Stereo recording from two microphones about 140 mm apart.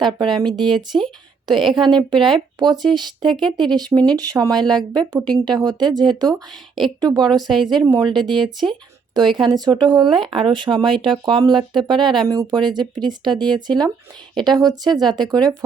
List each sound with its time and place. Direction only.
0.0 s speech: 35° right (ahead or behind)
0.9 s speech: centre (ahead or behind)
1.5 s speech: 35° right (ahead or behind)
7.3 s speech: centre (ahead or behind)
7.9 s speech: 30° right (ahead or behind)
9.3 s speech: 30° right (ahead or behind)